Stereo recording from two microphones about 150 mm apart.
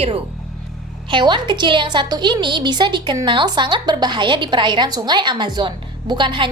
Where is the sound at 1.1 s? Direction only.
30° right (ahead or behind).